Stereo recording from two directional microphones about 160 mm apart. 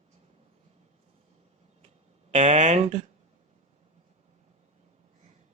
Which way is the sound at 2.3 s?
45° right (ahead or behind).